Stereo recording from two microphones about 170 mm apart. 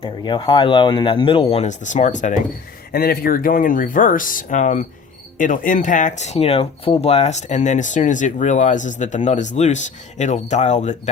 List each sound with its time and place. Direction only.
0.0 s speech: 30° left (ahead or behind); by 2.3 s 45° left (ahead or behind)
2.9 s speech: 65° left (ahead or behind); by 11.1 s 40° left (ahead or behind)